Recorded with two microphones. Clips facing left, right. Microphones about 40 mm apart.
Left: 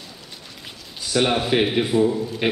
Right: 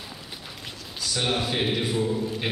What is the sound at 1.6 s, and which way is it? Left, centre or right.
Speech, centre.